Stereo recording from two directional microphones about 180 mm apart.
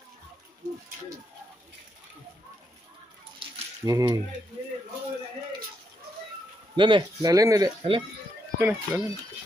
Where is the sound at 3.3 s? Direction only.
20° right (ahead or behind).